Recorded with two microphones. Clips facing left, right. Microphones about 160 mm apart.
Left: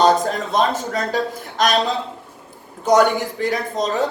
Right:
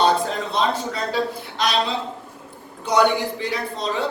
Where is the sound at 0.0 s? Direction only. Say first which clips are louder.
Left 3 dB; 45° left (ahead or behind).